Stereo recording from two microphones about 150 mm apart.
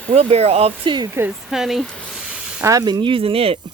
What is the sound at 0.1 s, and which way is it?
Speech, 45° right (ahead or behind).